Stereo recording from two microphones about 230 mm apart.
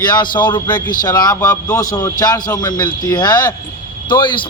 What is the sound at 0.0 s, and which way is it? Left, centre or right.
Speech, centre.